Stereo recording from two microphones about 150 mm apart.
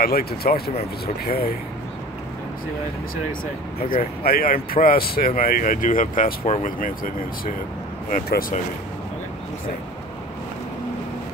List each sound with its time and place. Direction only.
0.0 s speech: 90° left
3.9 s speech: 80° left